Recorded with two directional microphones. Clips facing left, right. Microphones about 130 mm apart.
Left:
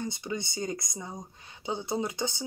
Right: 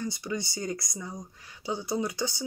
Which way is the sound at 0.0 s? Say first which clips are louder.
Right 1 dB; 20° left (ahead or behind).